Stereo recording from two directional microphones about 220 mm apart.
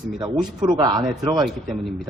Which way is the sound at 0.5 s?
20° right (ahead or behind).